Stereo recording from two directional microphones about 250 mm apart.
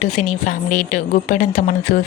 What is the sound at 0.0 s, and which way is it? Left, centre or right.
A woman's voice, left.